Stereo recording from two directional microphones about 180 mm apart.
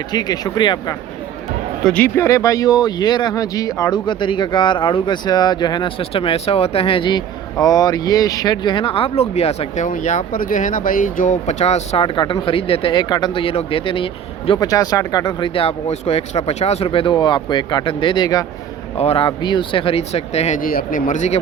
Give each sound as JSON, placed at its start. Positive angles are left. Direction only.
{"t": 0.1, "sound": "speech", "side_deg": 20}
{"t": 1.8, "sound": "speech", "side_deg": 5}
{"t": 18.9, "sound": "speech", "side_deg": 30}
{"t": 20.6, "sound": "speech", "side_deg": 50}